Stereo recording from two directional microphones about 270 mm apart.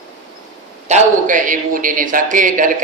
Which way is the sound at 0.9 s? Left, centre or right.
Right.